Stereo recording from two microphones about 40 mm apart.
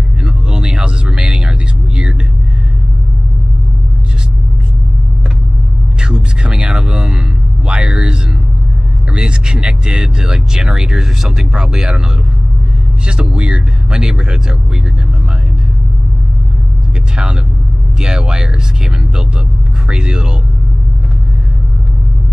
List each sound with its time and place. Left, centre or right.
0.2 s vehicle: right
5.9 s a sound: right
13.0 s speech: right
17.9 s speech: centre